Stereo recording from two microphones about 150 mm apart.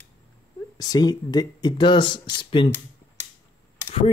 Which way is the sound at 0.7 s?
25° left (ahead or behind).